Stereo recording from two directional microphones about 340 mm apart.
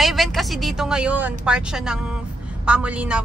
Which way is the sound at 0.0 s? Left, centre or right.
Centre.